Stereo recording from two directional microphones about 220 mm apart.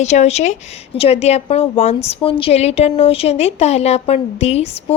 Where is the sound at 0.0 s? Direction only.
30° left (ahead or behind).